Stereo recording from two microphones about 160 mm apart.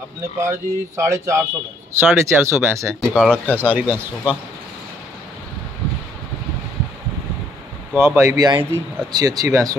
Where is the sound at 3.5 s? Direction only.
10° right (ahead or behind).